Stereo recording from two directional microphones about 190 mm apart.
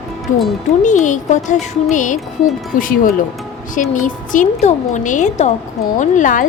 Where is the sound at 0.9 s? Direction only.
40° left (ahead or behind).